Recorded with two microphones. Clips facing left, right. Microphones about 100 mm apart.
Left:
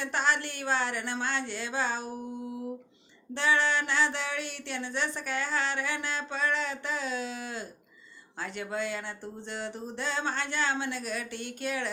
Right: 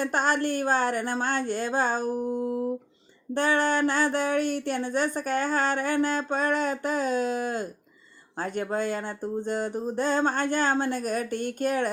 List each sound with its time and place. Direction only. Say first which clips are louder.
0.0 s speech: right 5 dB; 45° right (ahead or behind)